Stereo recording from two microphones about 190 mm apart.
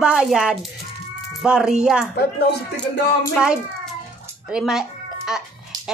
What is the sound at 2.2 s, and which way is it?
Speech, 60° left (ahead or behind).